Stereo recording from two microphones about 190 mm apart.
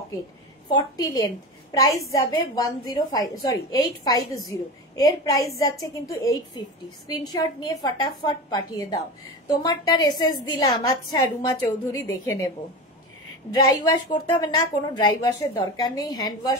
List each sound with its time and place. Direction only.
0.7 s a woman's voice: 20° left (ahead or behind)
13.5 s a woman's voice: 20° left (ahead or behind)